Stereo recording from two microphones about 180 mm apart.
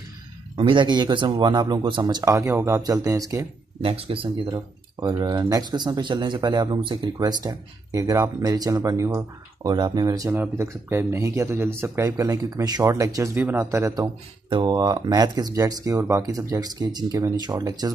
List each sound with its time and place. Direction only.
0.6 s speech: 25° right (ahead or behind)
3.8 s speech: 30° right (ahead or behind)